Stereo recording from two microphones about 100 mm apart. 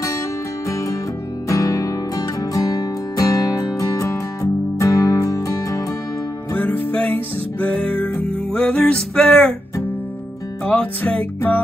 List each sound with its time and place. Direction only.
0.7 s music: 30° left (ahead or behind)
6.5 s music: 20° left (ahead or behind)
10.6 s music: 15° left (ahead or behind)